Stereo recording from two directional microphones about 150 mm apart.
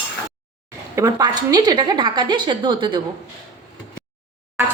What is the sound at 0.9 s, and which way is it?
A woman's voice, 25° right (ahead or behind).